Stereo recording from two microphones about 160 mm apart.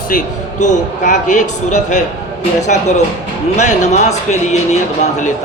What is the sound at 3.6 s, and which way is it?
A man's voice, 50° left (ahead or behind).